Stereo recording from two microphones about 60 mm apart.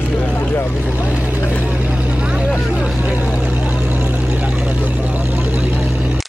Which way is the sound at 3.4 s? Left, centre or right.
Right.